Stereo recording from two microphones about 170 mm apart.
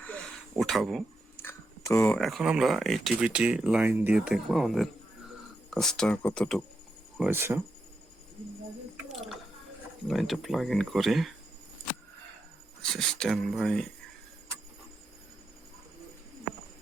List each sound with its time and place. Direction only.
0.5 s speech: centre (ahead or behind)
1.4 s a sound: 15° left (ahead or behind)
2.0 s speech: centre (ahead or behind)
7.2 s speech: 10° right (ahead or behind)
9.0 s a sound: centre (ahead or behind)
10.1 s speech: centre (ahead or behind)
12.8 s speech: 5° left (ahead or behind)